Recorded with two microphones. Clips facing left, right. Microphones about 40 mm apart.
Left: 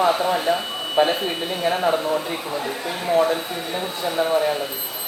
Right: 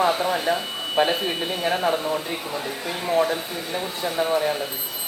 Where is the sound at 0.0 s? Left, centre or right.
Centre.